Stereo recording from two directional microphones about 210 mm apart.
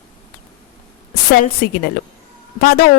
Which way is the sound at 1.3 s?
45° left (ahead or behind).